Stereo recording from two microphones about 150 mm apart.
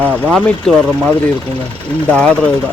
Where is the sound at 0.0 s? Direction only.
10° right (ahead or behind).